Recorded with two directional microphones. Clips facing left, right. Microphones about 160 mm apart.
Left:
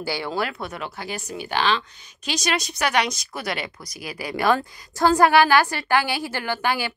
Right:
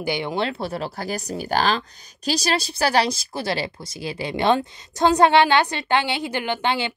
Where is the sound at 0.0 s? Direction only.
20° right (ahead or behind).